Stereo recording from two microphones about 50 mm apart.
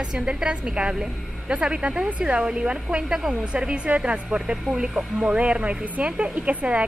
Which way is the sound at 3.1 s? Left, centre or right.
Centre.